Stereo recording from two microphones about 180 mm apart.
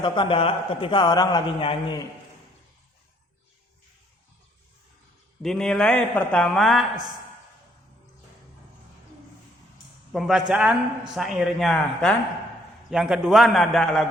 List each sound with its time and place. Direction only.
0.0 s a man's voice: 30° left (ahead or behind)
5.4 s a man's voice: 5° left (ahead or behind)
10.1 s a man's voice: centre (ahead or behind)